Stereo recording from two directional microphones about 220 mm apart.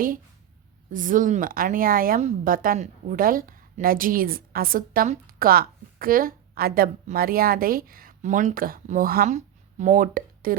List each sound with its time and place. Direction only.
0.9 s speech: 35° right (ahead or behind)